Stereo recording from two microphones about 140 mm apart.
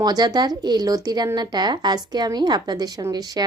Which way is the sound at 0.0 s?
30° right (ahead or behind).